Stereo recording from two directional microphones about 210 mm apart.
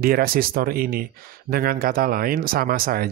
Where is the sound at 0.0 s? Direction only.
45° right (ahead or behind).